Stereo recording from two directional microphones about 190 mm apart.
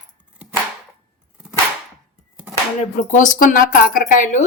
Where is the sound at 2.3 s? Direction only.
10° right (ahead or behind).